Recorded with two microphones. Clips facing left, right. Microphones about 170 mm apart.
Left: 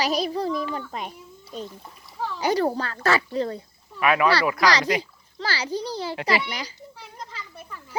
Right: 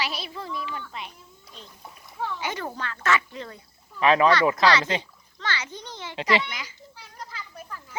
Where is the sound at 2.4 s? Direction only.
35° left (ahead or behind).